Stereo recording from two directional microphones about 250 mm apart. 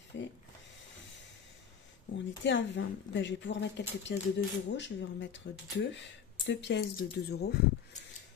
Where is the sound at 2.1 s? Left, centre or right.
Left.